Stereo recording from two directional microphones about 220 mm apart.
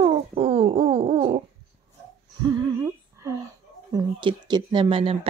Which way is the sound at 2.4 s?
15° right (ahead or behind).